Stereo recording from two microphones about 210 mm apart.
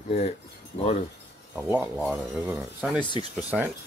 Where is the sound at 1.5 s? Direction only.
5° right (ahead or behind).